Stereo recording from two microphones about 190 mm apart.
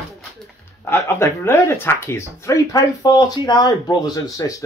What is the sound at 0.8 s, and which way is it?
Speech, 15° left (ahead or behind).